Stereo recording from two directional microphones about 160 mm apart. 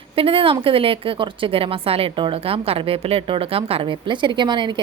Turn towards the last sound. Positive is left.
turn(degrees=-30)  # may be behind; listen again after turning